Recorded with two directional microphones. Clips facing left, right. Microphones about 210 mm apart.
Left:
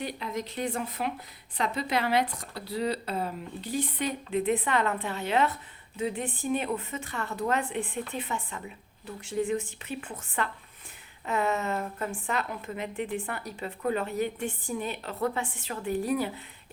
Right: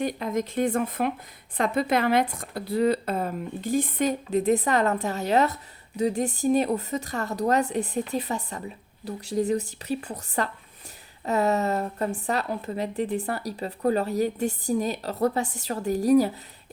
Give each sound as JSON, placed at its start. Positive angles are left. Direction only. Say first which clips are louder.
{"t": 0.0, "sound": "a woman's voice", "louder": "right 7 dB", "side_deg": -45}